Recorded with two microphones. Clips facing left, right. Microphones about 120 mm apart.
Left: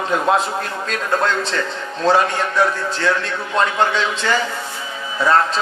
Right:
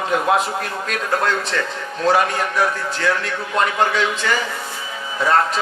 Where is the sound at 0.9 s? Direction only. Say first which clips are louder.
Left 1 dB; 30° left (ahead or behind).